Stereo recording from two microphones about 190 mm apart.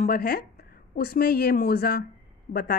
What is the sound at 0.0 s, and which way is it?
Speech, 50° left (ahead or behind).